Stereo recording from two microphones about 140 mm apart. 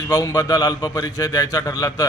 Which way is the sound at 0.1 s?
25° left (ahead or behind).